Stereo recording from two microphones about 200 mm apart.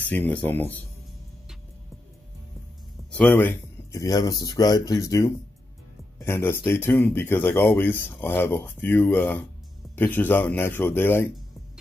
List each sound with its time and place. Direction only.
0.0 s speech: 10° left (ahead or behind)
3.1 s speech: 5° left (ahead or behind)